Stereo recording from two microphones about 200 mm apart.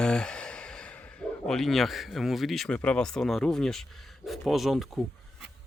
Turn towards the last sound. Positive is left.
turn(degrees=0)  # may be behind; listen again after turning